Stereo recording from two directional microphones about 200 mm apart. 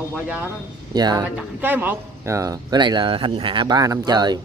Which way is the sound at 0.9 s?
20° right (ahead or behind).